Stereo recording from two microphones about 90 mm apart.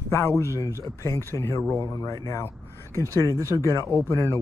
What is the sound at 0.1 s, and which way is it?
Speech, 30° left (ahead or behind).